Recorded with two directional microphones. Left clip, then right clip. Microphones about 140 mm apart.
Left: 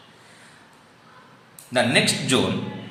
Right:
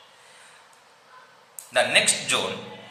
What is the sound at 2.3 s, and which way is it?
Speech, 15° left (ahead or behind).